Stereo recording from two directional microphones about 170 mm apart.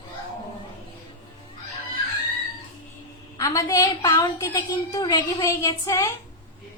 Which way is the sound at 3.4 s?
20° left (ahead or behind).